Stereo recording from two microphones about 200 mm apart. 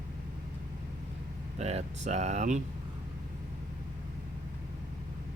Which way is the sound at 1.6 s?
30° right (ahead or behind).